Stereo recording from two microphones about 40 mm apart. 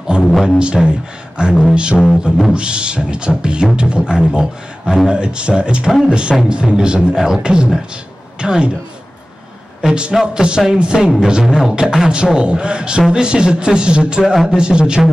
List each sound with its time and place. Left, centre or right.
0.2 s a sound: centre
0.8 s speech: centre
1.4 s beatboxing: right
9.8 s a man's voice: right
10.2 s beatboxing: right
11.1 s music: centre
11.7 s beatboxing: centre
14.2 s music: centre
14.6 s beatboxing: right